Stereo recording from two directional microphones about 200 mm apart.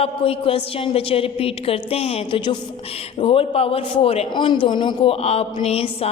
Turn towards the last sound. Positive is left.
turn(degrees=30)  # may be behind; listen again after turning